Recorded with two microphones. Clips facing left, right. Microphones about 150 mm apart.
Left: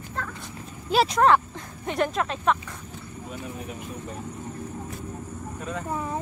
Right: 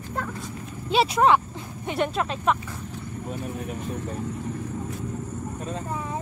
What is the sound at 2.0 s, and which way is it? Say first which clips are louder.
Speech: even; 30° right (ahead or behind).